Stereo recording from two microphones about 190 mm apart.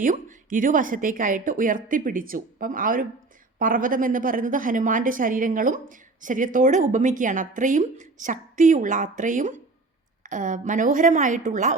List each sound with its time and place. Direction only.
0.0 s a woman's voice: 45° right (ahead or behind)